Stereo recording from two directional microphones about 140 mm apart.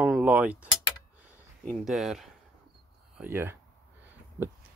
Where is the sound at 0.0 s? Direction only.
10° right (ahead or behind).